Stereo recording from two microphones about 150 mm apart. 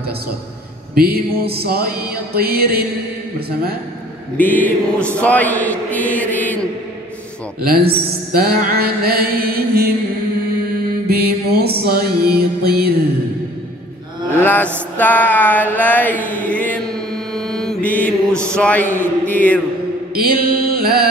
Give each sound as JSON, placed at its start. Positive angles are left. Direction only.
{"t": 0.9, "sound": "mantra", "side_deg": -90}
{"t": 4.4, "sound": "mantra", "side_deg": 10}
{"t": 7.6, "sound": "mantra", "side_deg": -90}
{"t": 11.1, "sound": "music", "side_deg": -90}
{"t": 14.4, "sound": "music", "side_deg": 15}
{"t": 15.0, "sound": "mantra", "side_deg": 10}
{"t": 20.2, "sound": "mantra", "side_deg": -85}